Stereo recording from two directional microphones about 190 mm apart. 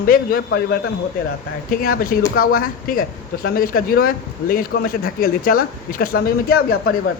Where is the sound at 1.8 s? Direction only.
50° left (ahead or behind).